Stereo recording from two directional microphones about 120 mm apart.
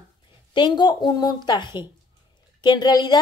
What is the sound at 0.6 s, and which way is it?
A woman's voice, 40° left (ahead or behind).